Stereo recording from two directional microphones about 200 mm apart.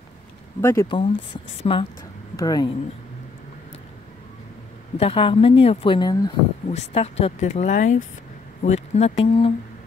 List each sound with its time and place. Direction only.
0.6 s speech: 10° left (ahead or behind)
0.8 s speech: 25° left (ahead or behind)
4.9 s speech: 30° left (ahead or behind)
6.7 s speech: 30° left (ahead or behind)